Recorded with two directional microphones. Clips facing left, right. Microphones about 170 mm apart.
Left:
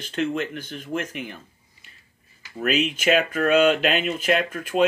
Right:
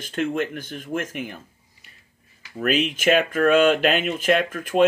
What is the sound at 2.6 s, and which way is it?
Speech, 45° right (ahead or behind).